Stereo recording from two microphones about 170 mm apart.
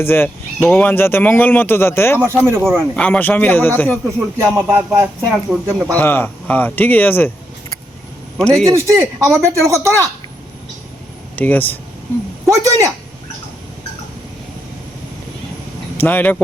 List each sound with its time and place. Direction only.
0.0 s speech: 15° left (ahead or behind)
2.1 s speech: 15° right (ahead or behind)
2.6 s speech: centre (ahead or behind)
4.4 s speech: 15° right (ahead or behind)
5.9 s speech: 10° left (ahead or behind)
8.4 s speech: 5° left (ahead or behind)
8.7 s speech: 15° right (ahead or behind)
11.3 s speech: 10° left (ahead or behind)
12.5 s speech: 20° right (ahead or behind)
16.0 s speech: 10° left (ahead or behind)